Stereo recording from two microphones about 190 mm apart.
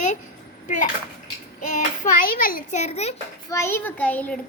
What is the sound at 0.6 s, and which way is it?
Speech, 40° left (ahead or behind).